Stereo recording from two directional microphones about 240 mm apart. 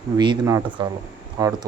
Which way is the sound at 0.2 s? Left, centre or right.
Centre.